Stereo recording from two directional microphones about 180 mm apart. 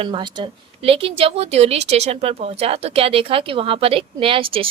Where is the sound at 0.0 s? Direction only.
25° right (ahead or behind).